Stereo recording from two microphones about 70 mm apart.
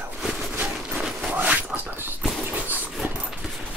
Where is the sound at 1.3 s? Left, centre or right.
Right.